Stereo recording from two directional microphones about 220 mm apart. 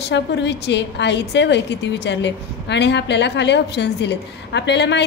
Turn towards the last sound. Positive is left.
turn(degrees=50)  # may be behind; listen again after turning